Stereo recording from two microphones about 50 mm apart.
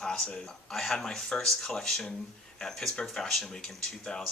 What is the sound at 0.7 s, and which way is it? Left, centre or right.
Speech, centre.